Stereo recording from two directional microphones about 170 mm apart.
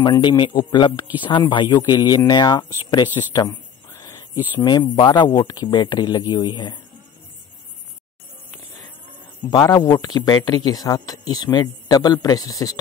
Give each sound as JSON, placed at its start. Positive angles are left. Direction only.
{"t": 0.0, "sound": "speech", "side_deg": 25}
{"t": 3.4, "sound": "a sound", "side_deg": 15}
{"t": 4.6, "sound": "speech", "side_deg": 25}
{"t": 9.5, "sound": "speech", "side_deg": 25}